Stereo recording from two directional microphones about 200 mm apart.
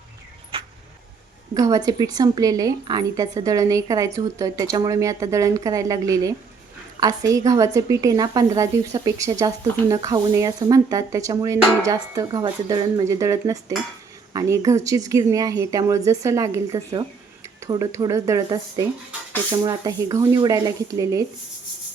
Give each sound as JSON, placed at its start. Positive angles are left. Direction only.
{"t": 1.5, "sound": "a woman's voice", "side_deg": -20}